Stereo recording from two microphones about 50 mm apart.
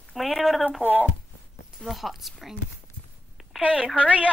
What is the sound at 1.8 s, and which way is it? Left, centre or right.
Speech, centre.